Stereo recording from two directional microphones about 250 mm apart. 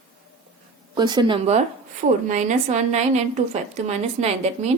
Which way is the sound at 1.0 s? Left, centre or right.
Centre.